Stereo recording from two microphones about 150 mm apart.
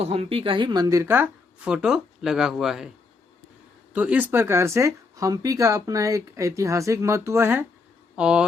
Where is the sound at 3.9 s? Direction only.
10° right (ahead or behind).